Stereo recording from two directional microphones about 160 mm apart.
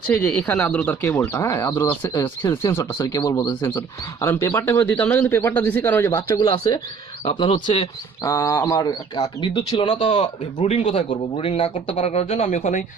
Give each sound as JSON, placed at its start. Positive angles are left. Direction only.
{"t": 0.1, "sound": "speech", "side_deg": 10}
{"t": 8.2, "sound": "speech", "side_deg": 20}
{"t": 9.4, "sound": "speech", "side_deg": 30}
{"t": 10.6, "sound": "speech", "side_deg": 40}